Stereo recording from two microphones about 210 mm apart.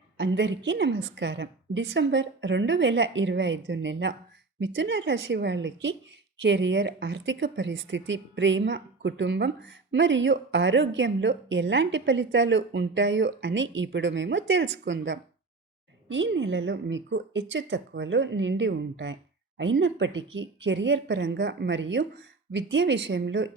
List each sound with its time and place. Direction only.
0.2 s speech: 55° right (ahead or behind)